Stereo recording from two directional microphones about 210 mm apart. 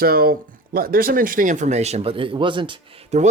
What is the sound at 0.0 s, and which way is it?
Speech, 45° right (ahead or behind).